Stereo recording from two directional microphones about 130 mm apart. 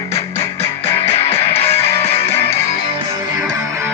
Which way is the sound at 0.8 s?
50° left (ahead or behind).